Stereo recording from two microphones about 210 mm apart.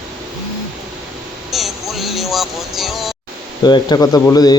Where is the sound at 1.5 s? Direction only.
Centre (ahead or behind).